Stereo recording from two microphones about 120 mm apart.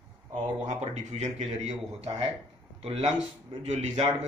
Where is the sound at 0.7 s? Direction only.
70° right (ahead or behind).